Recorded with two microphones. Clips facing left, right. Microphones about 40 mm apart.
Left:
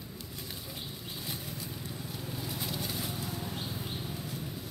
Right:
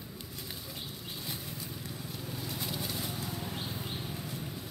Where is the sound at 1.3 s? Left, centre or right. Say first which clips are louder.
Left 2 dB; centre.